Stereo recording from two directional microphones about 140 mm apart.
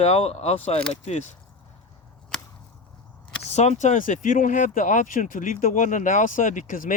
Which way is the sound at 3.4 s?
50° left (ahead or behind).